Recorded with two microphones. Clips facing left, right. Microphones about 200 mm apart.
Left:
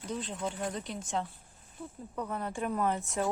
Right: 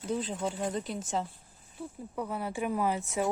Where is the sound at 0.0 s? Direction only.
5° right (ahead or behind).